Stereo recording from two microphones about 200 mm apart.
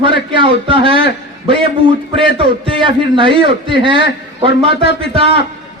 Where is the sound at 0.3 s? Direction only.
25° right (ahead or behind).